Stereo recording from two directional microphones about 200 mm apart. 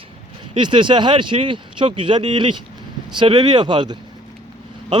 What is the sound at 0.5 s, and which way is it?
Speech, 25° right (ahead or behind).